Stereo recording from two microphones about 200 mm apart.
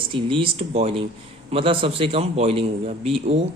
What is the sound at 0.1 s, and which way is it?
Speech, 25° right (ahead or behind).